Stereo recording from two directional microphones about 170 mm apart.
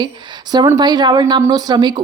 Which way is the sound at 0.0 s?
25° right (ahead or behind).